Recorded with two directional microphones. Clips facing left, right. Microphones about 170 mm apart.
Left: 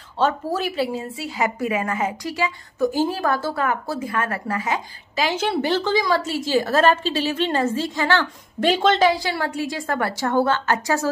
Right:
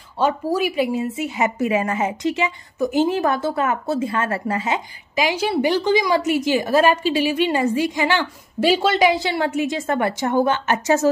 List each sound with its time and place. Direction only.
0.2 s a woman's voice: 10° right (ahead or behind)
9.1 s a woman's voice: 20° right (ahead or behind)